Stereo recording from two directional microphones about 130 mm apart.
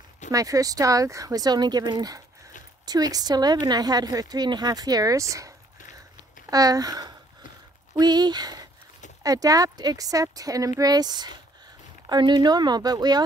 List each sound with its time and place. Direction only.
0.3 s speech: 25° right (ahead or behind)
6.5 s speech: 30° right (ahead or behind)